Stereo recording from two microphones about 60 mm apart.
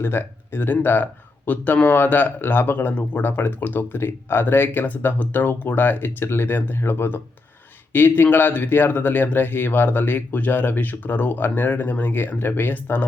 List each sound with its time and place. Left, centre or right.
0.0 s speech: left